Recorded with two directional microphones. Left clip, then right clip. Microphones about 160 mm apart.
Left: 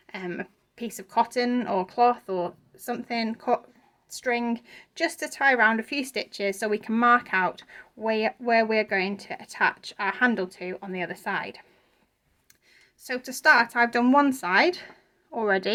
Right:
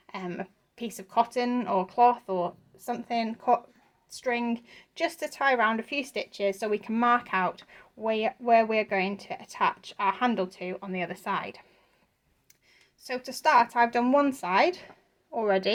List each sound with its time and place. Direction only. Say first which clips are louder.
0.1 s speech: left 2 dB; 20° left (ahead or behind)
12.7 s speech: left 2 dB; 20° left (ahead or behind)